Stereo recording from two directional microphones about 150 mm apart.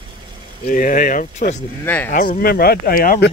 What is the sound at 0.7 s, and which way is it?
Speech, 60° left (ahead or behind).